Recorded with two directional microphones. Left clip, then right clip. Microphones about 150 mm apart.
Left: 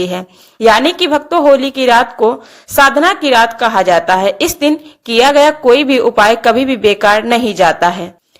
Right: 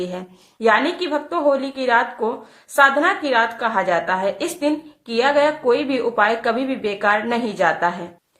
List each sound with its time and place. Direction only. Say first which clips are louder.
0.0 s a woman's voice: left 10 dB; 45° left (ahead or behind)